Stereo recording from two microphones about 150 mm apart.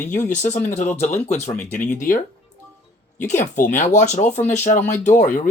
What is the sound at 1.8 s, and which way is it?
Speech, 60° left (ahead or behind).